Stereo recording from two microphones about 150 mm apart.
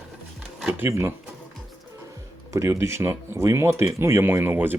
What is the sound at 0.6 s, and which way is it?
Speech, 15° right (ahead or behind).